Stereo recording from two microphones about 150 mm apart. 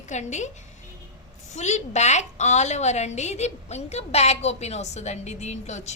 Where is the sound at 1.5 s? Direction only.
50° left (ahead or behind).